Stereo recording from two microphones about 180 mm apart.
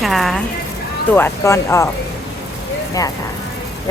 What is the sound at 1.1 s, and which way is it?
Speech, 15° left (ahead or behind).